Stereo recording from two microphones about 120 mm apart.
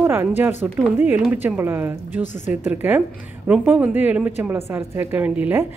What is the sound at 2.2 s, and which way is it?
Speech, 90° left.